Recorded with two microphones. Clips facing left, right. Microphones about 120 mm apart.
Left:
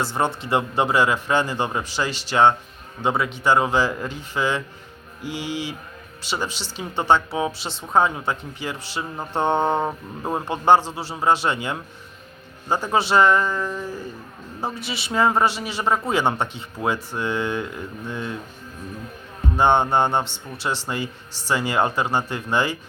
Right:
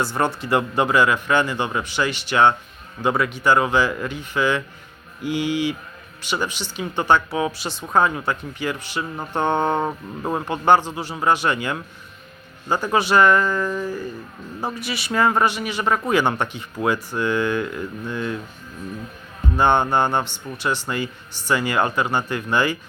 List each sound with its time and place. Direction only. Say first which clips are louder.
0.0 s a man's voice: right 1 dB; 25° left (ahead or behind)
19.5 s speech: even; 25° left (ahead or behind)